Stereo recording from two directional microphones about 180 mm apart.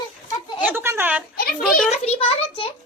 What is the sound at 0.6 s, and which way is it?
Speech, 10° right (ahead or behind).